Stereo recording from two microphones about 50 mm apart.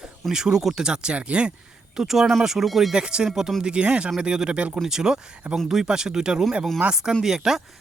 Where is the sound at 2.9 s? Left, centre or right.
Centre.